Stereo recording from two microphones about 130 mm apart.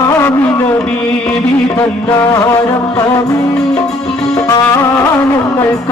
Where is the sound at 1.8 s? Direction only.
25° left (ahead or behind).